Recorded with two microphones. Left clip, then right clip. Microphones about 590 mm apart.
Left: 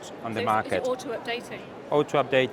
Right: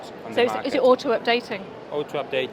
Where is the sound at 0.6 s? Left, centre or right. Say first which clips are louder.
Right 9 dB; right.